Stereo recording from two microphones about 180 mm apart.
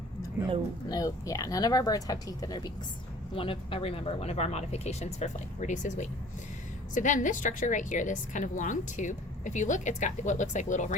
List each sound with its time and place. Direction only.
0.9 s a woman's voice: 20° left (ahead or behind); by 10.9 s 45° left (ahead or behind)